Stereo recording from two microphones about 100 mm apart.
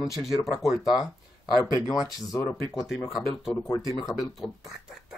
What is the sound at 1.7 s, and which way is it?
Speech, 35° left (ahead or behind).